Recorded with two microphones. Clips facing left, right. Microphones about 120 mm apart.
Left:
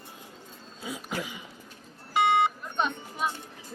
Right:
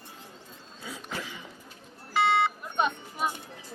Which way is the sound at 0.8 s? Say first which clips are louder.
Left 3 dB; 10° left (ahead or behind).